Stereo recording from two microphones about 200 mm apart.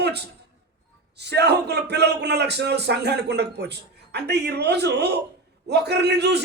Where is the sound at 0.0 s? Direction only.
55° right (ahead or behind).